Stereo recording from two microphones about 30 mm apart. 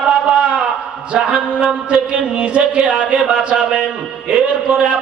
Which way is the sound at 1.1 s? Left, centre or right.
Right.